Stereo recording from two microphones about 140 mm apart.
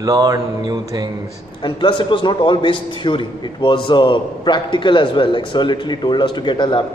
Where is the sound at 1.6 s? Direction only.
35° left (ahead or behind).